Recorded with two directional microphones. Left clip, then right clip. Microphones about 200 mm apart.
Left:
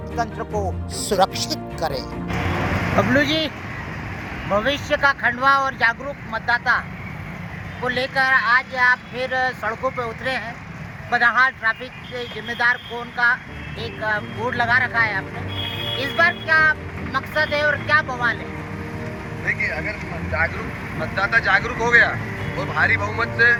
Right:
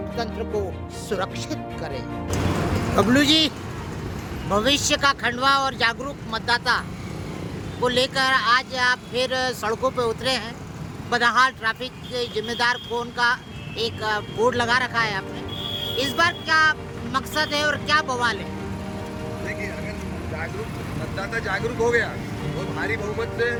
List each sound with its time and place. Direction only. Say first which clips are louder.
1.1 s speech: left 8 dB; 20° left (ahead or behind)
2.9 s speech: right 1 dB; 20° right (ahead or behind)
4.5 s speech: even; 20° right (ahead or behind)
7.9 s speech: left 1 dB; 20° right (ahead or behind)
19.5 s speech: left 11 dB; 15° right (ahead or behind)
21.2 s speech: left 9 dB; 20° right (ahead or behind)